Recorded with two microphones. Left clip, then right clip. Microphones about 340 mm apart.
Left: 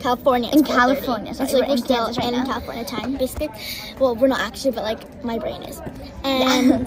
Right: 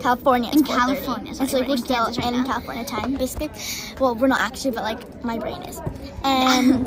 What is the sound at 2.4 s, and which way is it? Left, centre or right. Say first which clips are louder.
A woman's voice: even; centre.